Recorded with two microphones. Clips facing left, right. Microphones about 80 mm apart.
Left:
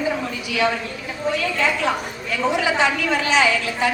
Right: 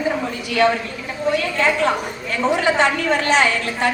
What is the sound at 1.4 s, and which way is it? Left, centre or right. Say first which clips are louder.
A woman's voice: right 2 dB; right.